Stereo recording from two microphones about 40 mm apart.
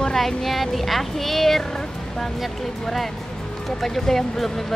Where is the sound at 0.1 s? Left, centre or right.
Centre.